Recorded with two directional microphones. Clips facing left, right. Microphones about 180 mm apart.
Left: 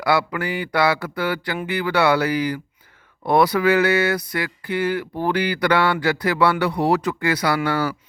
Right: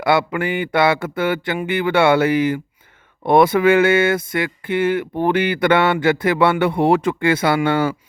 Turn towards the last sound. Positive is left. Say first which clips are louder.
# right 4 dB
turn(degrees=-25)  # may be behind; listen again after turning